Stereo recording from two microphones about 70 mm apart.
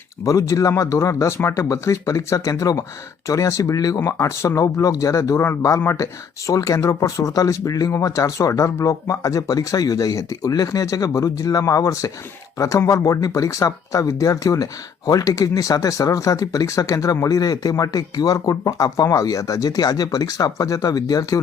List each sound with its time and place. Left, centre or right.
0.3 s speech: left
5.8 s speech: left
6.5 s speech: left
7.9 s speech: left